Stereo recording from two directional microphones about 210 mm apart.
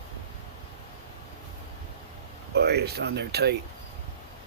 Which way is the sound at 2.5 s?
50° right (ahead or behind).